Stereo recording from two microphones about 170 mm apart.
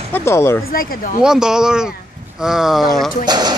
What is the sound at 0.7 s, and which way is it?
Speech, 60° left (ahead or behind).